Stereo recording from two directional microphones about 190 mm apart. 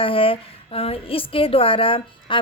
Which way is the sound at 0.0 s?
30° left (ahead or behind).